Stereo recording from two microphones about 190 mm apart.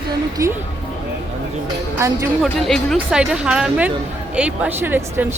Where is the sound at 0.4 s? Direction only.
15° right (ahead or behind).